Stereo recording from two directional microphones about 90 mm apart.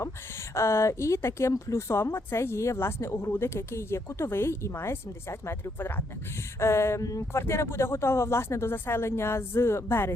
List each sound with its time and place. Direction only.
0.5 s speech: 30° left (ahead or behind)